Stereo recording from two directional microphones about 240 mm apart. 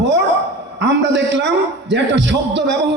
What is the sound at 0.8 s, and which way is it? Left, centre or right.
A man's voice, right.